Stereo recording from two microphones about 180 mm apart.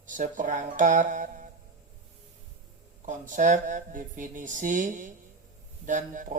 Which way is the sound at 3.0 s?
45° right (ahead or behind).